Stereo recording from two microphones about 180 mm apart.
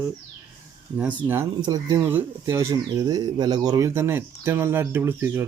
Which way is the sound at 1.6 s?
20° right (ahead or behind).